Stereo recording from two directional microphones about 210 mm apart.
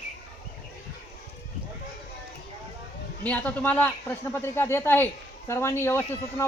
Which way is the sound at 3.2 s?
5° left (ahead or behind).